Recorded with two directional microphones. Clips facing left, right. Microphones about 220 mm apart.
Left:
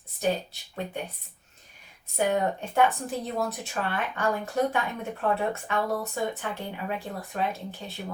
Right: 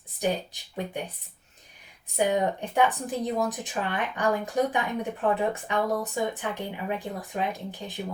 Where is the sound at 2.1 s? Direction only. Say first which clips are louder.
Right 1 dB; 15° right (ahead or behind).